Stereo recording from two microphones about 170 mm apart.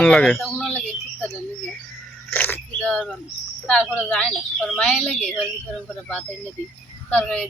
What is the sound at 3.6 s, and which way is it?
A woman's voice, 5° left (ahead or behind).